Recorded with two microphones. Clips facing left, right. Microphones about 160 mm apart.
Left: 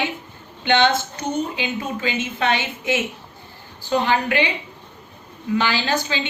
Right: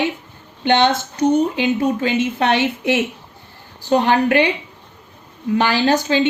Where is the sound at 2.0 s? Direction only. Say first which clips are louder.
Right 5 dB; 60° right (ahead or behind).